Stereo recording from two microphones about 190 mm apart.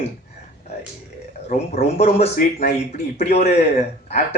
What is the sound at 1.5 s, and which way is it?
Speech, 40° left (ahead or behind).